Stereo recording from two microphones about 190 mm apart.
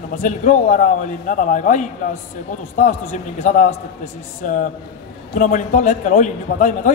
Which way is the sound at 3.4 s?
40° left (ahead or behind).